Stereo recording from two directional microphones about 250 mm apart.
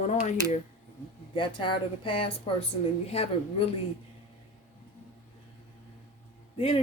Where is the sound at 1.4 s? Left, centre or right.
Left.